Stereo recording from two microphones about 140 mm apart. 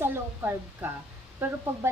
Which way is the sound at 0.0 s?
15° right (ahead or behind).